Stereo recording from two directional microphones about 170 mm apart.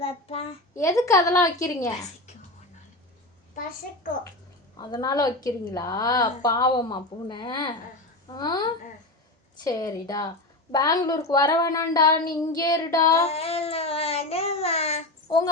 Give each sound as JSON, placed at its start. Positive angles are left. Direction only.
{"t": 0.0, "sound": "a child's voice", "side_deg": 35}
{"t": 0.8, "sound": "a woman's voice", "side_deg": 20}
{"t": 3.5, "sound": "a child's voice", "side_deg": 50}
{"t": 4.8, "sound": "a woman's voice", "side_deg": 25}
{"t": 13.2, "sound": "a sound", "side_deg": 35}